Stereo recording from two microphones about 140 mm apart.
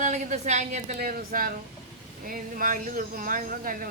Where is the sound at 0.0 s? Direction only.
60° right (ahead or behind).